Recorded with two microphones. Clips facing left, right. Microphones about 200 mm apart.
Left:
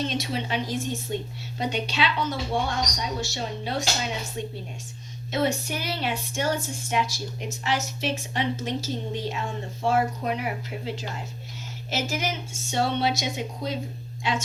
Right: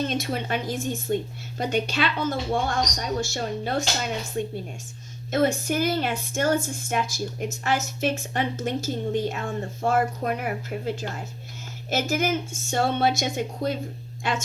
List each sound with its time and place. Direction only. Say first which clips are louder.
0.0 s speech: right 2 dB; 50° right (ahead or behind)